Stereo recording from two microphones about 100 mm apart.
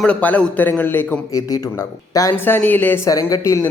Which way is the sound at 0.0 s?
15° left (ahead or behind).